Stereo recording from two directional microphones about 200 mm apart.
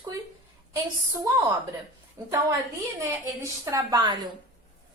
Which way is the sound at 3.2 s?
10° right (ahead or behind).